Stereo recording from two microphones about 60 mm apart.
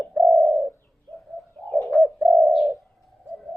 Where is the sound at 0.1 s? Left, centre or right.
Centre.